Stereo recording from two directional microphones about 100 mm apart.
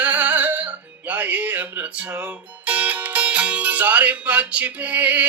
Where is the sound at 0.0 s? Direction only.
15° right (ahead or behind).